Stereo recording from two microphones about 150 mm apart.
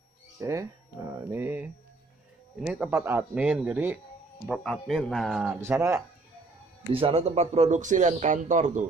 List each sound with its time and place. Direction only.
0.4 s speech: 20° right (ahead or behind)
4.5 s speech: centre (ahead or behind)
5.6 s speech: 20° right (ahead or behind)
6.9 s speech: 40° right (ahead or behind); by 8.8 s 55° right (ahead or behind)